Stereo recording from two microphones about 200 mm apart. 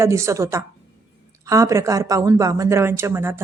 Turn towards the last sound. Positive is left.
turn(degrees=-10)  # may be behind; listen again after turning